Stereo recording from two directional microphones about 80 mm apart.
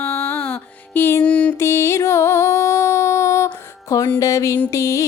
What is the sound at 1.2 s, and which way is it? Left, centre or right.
Music, centre.